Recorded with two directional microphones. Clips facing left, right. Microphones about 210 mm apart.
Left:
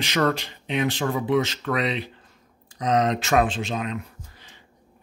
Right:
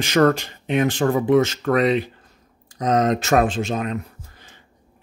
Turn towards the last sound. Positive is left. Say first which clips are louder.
# right 1 dB
turn(degrees=-45)  # may be behind; listen again after turning